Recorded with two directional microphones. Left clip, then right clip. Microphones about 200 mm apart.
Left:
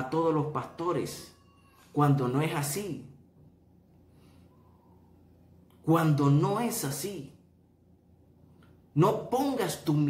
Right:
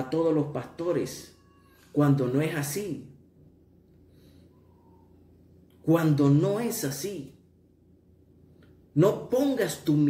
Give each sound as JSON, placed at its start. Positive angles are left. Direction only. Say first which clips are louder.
{"t": 0.1, "sound": "speech", "louder": "right 2 dB", "side_deg": 0}
{"t": 5.9, "sound": "speech", "louder": "right 3 dB", "side_deg": 0}
{"t": 8.9, "sound": "speech", "louder": "right 3 dB", "side_deg": 5}